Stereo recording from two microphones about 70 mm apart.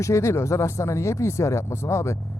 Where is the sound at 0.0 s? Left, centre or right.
Left.